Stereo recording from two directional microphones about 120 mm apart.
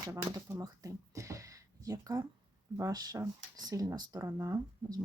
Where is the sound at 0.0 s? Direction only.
30° right (ahead or behind).